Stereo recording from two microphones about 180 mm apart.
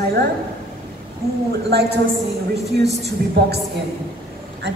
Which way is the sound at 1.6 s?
65° right (ahead or behind).